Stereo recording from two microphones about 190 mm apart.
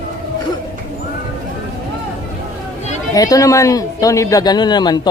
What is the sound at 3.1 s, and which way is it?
A man's voice, 20° left (ahead or behind).